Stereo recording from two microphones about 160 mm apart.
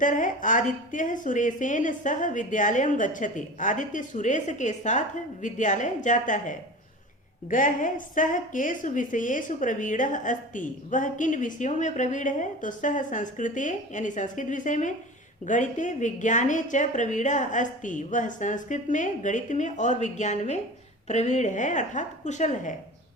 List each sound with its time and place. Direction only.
0.0 s a woman's voice: 55° left (ahead or behind)